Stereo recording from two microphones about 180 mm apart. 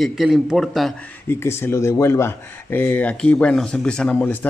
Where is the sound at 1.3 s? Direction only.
15° left (ahead or behind).